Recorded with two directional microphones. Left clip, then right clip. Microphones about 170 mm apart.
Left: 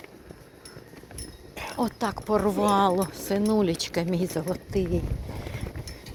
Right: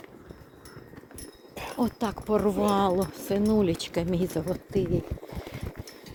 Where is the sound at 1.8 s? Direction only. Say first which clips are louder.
Left 2 dB; 30° right (ahead or behind).